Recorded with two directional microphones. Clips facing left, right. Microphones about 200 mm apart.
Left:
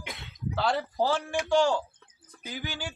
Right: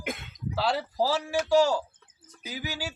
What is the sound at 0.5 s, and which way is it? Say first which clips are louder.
A man's voice: even; 5° right (ahead or behind).